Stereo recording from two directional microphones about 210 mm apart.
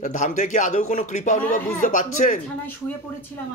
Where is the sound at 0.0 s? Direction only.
35° left (ahead or behind).